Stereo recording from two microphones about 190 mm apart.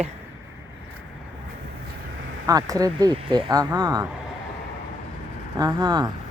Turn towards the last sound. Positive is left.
turn(degrees=-20)  # may be behind; listen again after turning